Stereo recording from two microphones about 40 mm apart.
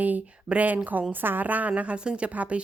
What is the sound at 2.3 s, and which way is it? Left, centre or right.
Speech, right.